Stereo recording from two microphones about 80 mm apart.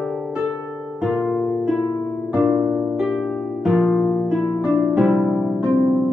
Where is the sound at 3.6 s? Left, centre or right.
Centre.